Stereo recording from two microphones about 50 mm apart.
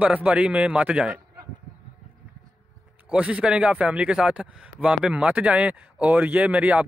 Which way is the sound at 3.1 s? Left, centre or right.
Right.